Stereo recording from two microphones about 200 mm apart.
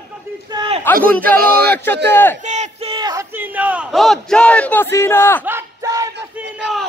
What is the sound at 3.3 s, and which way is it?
A man's voice, 5° right (ahead or behind).